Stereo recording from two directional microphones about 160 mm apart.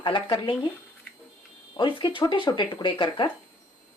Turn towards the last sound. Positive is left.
turn(degrees=30)  # may be behind; listen again after turning